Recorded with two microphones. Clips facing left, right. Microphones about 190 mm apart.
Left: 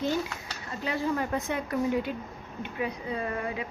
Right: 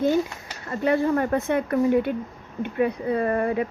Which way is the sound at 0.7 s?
55° right (ahead or behind).